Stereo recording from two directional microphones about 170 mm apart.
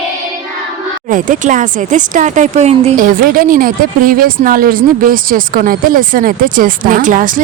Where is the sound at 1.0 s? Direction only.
50° right (ahead or behind).